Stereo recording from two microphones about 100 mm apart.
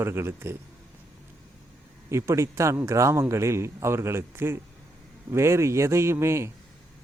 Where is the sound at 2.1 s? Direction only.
30° right (ahead or behind).